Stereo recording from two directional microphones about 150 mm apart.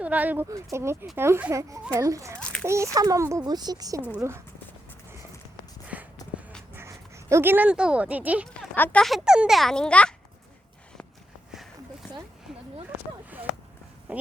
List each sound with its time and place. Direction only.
0.0 s a child's voice: 10° right (ahead or behind)
2.4 s a child's voice: 5° left (ahead or behind)
2.6 s a child's voice: 20° right (ahead or behind)
5.9 s a sound: 10° right (ahead or behind)
6.7 s speech: 20° right (ahead or behind)
8.4 s a child's voice: 10° left (ahead or behind)
12.5 s a sound: 5° right (ahead or behind)